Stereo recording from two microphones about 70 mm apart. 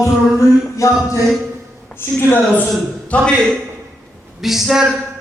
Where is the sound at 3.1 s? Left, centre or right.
Centre.